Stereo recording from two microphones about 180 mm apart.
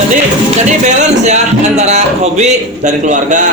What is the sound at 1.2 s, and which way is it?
A man's voice, 40° right (ahead or behind).